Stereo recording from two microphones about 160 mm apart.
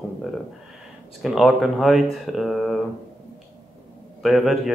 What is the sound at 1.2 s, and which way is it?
Speech, centre (ahead or behind).